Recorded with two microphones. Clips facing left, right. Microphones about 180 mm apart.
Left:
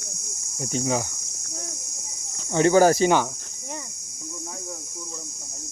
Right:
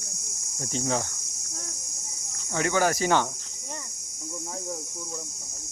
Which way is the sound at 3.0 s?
20° left (ahead or behind).